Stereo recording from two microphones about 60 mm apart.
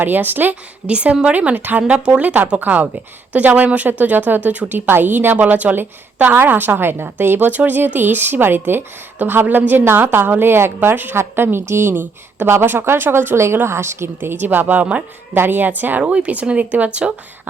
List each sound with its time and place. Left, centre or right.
0.0 s a woman's voice: right
0.9 s speech: right
1.9 s a woman's voice: right
14.2 s a woman's voice: right